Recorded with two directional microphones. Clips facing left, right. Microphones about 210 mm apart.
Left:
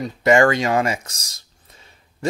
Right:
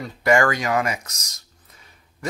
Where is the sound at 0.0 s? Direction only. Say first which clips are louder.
Left 4 dB; 25° left (ahead or behind).